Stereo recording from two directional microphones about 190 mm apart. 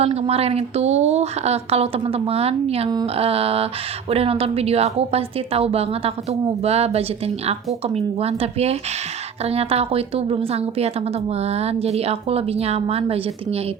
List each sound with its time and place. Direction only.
0.0 s speech: 30° right (ahead or behind)